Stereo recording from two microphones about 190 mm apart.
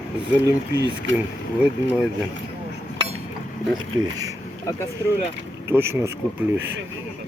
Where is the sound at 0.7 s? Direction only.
65° right (ahead or behind).